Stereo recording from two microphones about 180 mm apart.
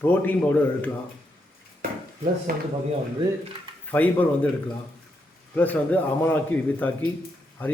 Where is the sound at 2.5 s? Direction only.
55° right (ahead or behind).